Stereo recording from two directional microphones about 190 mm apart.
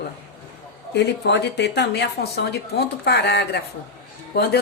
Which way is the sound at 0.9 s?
65° left (ahead or behind).